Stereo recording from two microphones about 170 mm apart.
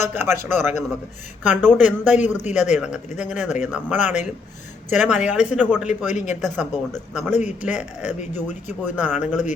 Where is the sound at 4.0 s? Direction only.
45° left (ahead or behind).